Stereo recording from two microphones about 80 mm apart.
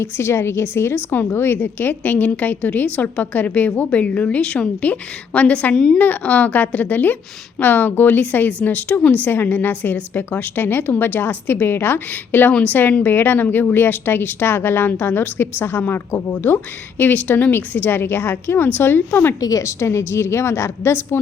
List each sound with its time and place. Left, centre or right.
0.0 s a woman's voice: left; by 5.7 s centre
5.7 s a woman's voice: centre
6.0 s a woman's voice: left
17.0 s a woman's voice: left
19.4 s a woman's voice: left